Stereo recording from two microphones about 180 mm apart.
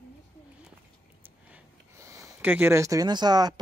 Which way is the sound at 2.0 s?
15° right (ahead or behind).